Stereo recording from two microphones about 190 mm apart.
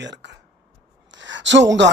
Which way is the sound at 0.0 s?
65° right (ahead or behind).